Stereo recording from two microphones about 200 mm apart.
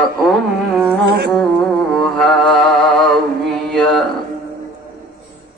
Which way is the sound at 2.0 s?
Centre (ahead or behind).